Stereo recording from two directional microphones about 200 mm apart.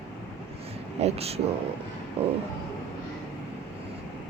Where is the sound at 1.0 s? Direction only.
30° right (ahead or behind).